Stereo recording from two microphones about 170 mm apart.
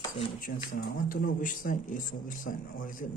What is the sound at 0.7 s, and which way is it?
A man's voice, 55° left (ahead or behind).